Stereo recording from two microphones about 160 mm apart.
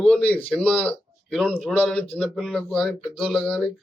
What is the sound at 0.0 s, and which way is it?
A man's voice, 10° left (ahead or behind).